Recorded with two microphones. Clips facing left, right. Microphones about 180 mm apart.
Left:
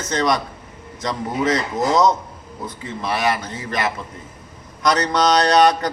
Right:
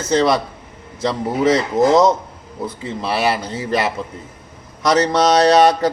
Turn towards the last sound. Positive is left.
turn(degrees=-25)  # may be behind; listen again after turning